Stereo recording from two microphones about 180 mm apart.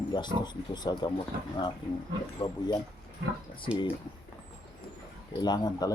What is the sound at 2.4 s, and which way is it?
Speech, 30° left (ahead or behind).